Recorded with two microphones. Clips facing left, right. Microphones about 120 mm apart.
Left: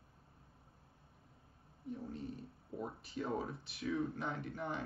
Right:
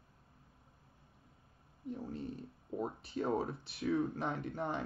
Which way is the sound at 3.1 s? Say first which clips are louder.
Right 4 dB; 35° right (ahead or behind).